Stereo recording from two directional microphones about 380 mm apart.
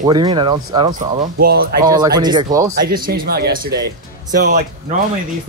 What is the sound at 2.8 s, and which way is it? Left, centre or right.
Speech, right.